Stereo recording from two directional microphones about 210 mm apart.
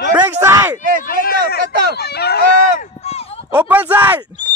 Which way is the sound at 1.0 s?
45° left (ahead or behind).